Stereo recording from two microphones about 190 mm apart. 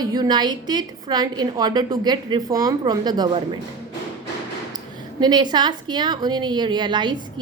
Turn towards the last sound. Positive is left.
turn(degrees=-25)  # may be behind; listen again after turning